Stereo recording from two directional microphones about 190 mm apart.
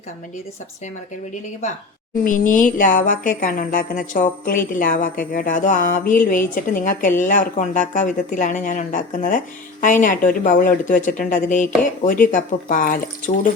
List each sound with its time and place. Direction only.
2.2 s speech: 45° left (ahead or behind)